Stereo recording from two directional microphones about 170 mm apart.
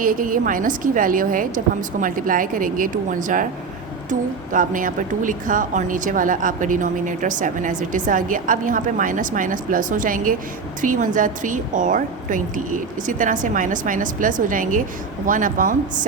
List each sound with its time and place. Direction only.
0.0 s a woman's voice: 55° right (ahead or behind)